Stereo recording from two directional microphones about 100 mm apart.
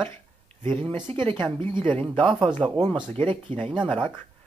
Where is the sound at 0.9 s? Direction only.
55° right (ahead or behind).